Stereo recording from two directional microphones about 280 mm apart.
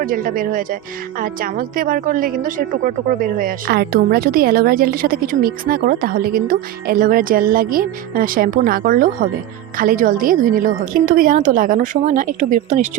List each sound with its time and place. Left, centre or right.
0.0 s a woman's voice: right